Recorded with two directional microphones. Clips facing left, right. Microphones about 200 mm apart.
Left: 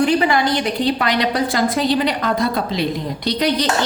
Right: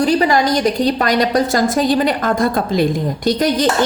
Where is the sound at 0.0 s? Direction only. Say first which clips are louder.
Right 2 dB; 40° right (ahead or behind).